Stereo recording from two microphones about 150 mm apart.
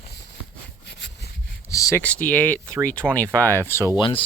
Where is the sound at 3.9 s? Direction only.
35° left (ahead or behind).